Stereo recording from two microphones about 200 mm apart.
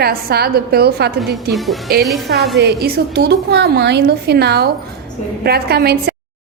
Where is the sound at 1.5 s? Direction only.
Centre (ahead or behind).